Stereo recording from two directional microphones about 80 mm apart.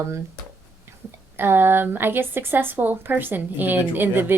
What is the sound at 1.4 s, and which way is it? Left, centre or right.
Speech, right.